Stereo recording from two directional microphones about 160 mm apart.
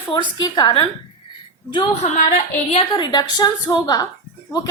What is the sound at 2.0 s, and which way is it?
Speech, 45° left (ahead or behind).